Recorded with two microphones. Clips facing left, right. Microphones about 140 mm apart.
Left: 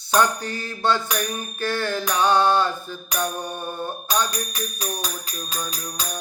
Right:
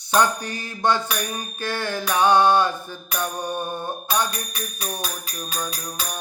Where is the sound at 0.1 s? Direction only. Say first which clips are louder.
Even; 15° right (ahead or behind).